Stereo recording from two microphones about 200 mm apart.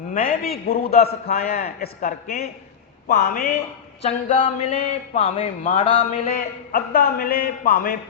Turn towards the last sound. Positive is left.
turn(degrees=45)  # may be behind; listen again after turning